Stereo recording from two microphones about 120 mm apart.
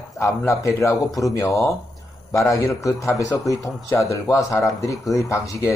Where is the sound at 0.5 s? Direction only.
25° left (ahead or behind).